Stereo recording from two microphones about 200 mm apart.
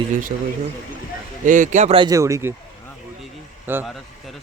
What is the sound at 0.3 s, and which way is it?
A man's voice, 45° right (ahead or behind).